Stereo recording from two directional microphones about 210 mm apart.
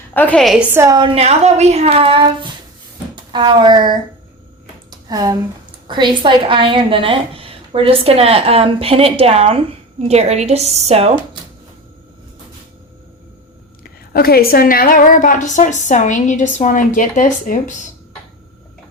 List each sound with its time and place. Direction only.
0.1 s a woman's voice: 10° left (ahead or behind)
0.7 s a woman's voice: 15° right (ahead or behind)
1.1 s a woman's voice: 30° right (ahead or behind)
4.9 s a sound: 20° right (ahead or behind)
5.9 s a woman's voice: 20° right (ahead or behind)
13.8 s a woman's voice: 45° left (ahead or behind)